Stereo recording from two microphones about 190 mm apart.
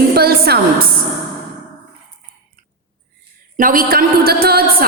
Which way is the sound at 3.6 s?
45° right (ahead or behind).